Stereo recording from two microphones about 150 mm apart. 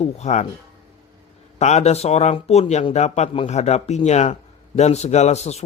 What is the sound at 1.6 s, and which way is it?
Speech, 45° left (ahead or behind).